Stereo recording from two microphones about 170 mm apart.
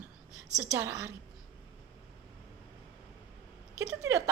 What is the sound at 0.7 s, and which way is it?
Speech, 15° right (ahead or behind).